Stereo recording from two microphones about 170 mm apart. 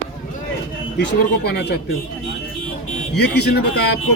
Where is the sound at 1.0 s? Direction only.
85° left.